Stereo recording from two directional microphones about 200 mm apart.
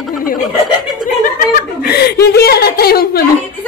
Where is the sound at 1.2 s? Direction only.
45° left (ahead or behind).